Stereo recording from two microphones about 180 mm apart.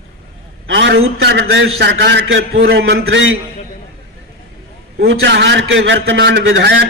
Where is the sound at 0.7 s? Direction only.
75° right (ahead or behind); by 3.3 s 90° right.